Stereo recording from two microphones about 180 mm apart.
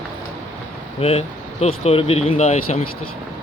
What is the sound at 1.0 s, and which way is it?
Speech, 35° left (ahead or behind).